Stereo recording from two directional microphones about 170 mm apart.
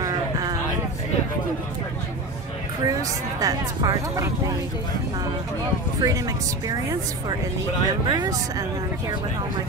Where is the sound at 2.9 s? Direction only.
20° right (ahead or behind).